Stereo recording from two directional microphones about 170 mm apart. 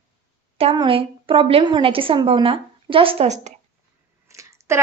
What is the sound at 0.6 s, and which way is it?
A woman's voice, 30° right (ahead or behind).